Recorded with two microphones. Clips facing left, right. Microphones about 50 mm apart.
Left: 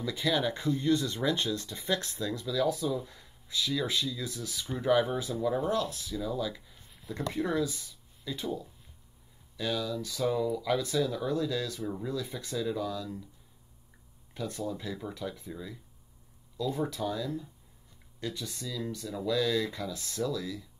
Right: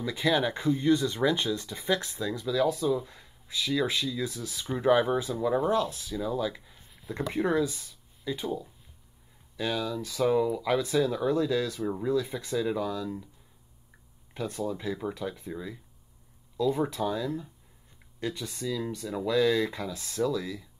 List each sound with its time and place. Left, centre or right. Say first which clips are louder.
0.1 s speech: right 3 dB; right
4.9 s speech: right 1 dB; centre
5.7 s speech: right 3 dB; right
7.0 s speech: right 2 dB; centre
7.5 s speech: right 3 dB; right
14.3 s speech: right 3 dB; right
18.2 s speech: right 4 dB; right